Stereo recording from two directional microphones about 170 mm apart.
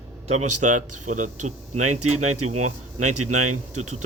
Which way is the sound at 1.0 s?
45° right (ahead or behind).